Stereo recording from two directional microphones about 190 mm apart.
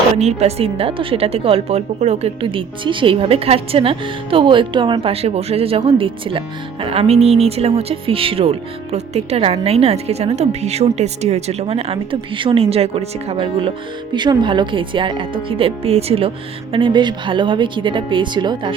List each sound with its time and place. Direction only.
0.2 s a woman's voice: 35° right (ahead or behind)